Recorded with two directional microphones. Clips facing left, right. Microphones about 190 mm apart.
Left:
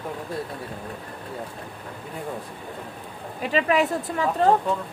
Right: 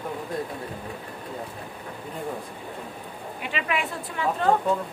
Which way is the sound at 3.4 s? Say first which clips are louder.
Left 8 dB; 40° left (ahead or behind).